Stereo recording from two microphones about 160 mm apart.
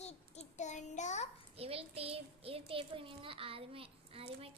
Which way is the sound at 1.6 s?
40° right (ahead or behind).